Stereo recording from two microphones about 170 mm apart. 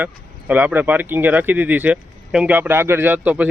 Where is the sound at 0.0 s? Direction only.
10° right (ahead or behind).